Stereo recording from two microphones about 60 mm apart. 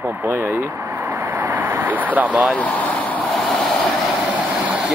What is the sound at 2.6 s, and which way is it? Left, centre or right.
Vehicle, left.